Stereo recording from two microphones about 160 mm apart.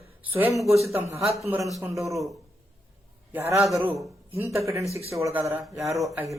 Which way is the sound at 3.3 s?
15° right (ahead or behind).